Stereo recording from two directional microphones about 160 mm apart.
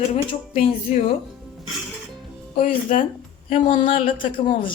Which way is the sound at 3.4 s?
40° left (ahead or behind).